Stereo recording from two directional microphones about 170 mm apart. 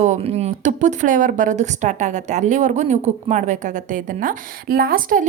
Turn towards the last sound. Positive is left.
turn(degrees=-55)  # may be behind; listen again after turning